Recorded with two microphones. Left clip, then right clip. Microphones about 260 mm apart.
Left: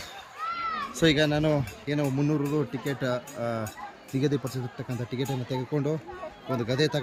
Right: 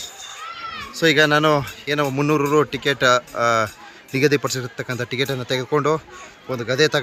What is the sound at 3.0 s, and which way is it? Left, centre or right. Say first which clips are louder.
Speech: right 15 dB; right.